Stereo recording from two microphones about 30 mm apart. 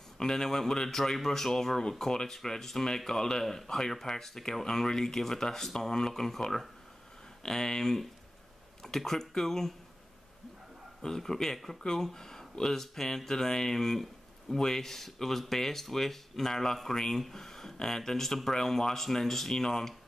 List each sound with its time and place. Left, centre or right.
0.2 s speech: centre
11.0 s speech: centre